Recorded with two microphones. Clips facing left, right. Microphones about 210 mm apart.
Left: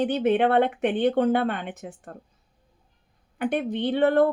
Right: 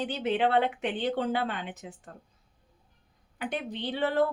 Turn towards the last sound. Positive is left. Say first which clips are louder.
# left 7 dB
turn(degrees=55)  # may be behind; listen again after turning